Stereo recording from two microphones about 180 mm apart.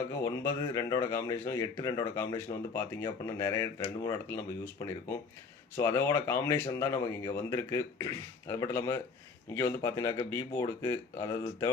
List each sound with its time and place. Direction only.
0.3 s speech: 20° left (ahead or behind)